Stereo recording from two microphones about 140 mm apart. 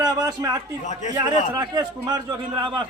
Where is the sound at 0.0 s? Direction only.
25° right (ahead or behind).